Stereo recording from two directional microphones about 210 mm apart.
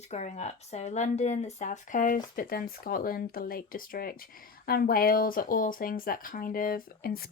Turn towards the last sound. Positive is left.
turn(degrees=45)  # may be behind; listen again after turning